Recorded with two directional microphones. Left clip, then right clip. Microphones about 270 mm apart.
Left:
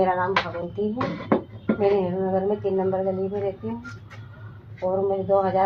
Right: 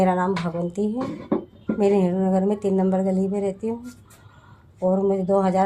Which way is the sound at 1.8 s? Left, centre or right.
Right.